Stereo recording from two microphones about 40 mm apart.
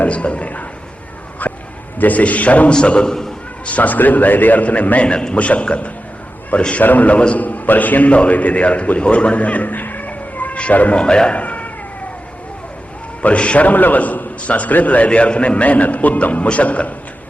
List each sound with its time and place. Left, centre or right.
0.0 s a man's voice: left
1.4 s a sound: left
2.0 s a man's voice: left
2.7 s a man's voice: left
3.9 s a man's voice: left
5.0 s a man's voice: left
6.8 s a man's voice: left
7.2 s a man's voice: left
7.4 s a man's voice: left
10.1 s cat: left
10.6 s a man's voice: left
10.9 s a man's voice: left
11.3 s cat: left
13.2 s a man's voice: left